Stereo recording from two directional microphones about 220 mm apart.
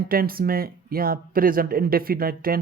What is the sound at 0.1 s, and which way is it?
Speech, 40° right (ahead or behind).